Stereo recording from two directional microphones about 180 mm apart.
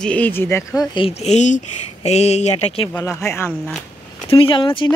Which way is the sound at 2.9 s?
15° left (ahead or behind).